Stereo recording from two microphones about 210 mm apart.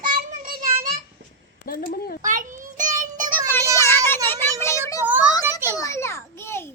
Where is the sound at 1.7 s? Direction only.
45° left (ahead or behind).